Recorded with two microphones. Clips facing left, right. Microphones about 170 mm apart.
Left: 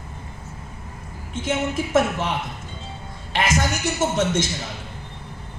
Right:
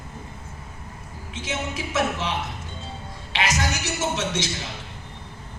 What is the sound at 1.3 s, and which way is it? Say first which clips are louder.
Speech: left 7 dB; 50° left (ahead or behind).